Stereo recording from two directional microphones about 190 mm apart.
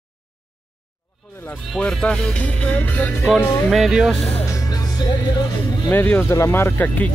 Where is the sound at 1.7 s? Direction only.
5° left (ahead or behind).